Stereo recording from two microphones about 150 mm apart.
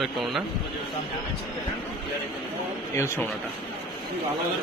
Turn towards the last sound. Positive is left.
turn(degrees=20)  # may be behind; listen again after turning